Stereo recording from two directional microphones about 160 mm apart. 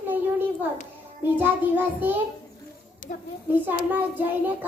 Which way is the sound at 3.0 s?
60° left (ahead or behind).